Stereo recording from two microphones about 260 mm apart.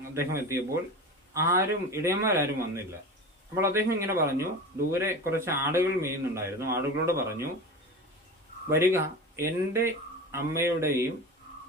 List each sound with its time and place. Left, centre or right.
0.1 s a man's voice: centre
8.9 s a man's voice: centre